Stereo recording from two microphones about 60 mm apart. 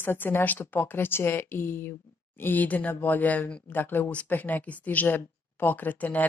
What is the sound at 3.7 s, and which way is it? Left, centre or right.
Speech, left.